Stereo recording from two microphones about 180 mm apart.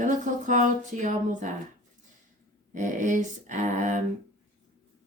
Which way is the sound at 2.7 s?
45° right (ahead or behind).